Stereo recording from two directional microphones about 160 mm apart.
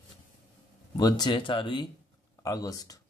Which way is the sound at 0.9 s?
25° left (ahead or behind).